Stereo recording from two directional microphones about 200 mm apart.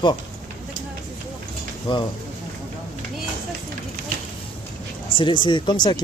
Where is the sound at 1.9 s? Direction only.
25° left (ahead or behind).